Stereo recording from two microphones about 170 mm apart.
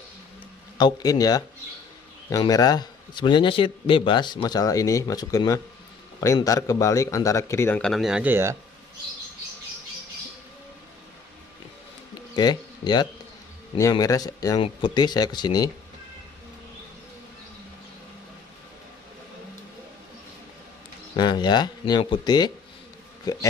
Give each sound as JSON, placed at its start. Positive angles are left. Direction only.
{"t": 0.7, "sound": "a man's voice", "side_deg": 25}
{"t": 7.8, "sound": "speech", "side_deg": 0}
{"t": 12.4, "sound": "a man's voice", "side_deg": 25}
{"t": 21.2, "sound": "a man's voice", "side_deg": 25}